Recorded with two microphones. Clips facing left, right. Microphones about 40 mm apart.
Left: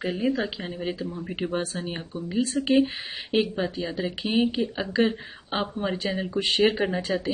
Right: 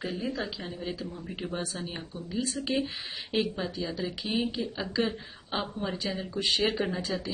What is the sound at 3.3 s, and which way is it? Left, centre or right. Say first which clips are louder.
A woman's voice: left 5 dB; left.